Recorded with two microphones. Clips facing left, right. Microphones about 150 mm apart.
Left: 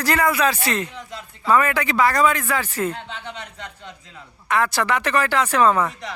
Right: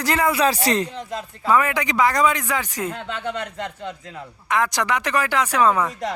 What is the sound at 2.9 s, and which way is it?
Speech, 55° right (ahead or behind).